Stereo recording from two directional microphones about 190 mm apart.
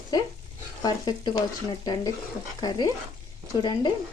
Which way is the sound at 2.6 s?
20° left (ahead or behind).